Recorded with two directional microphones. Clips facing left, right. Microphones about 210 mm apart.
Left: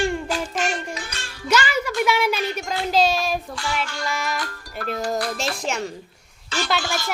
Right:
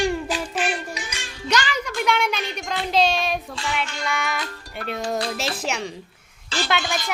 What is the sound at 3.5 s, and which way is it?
Child singing, 20° right (ahead or behind).